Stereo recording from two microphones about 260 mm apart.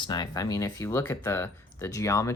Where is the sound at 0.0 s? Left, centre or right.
Centre.